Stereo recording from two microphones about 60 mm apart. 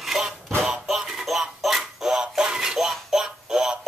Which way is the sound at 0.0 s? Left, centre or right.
Centre.